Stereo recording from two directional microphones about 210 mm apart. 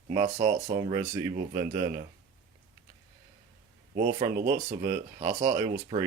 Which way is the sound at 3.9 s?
40° right (ahead or behind).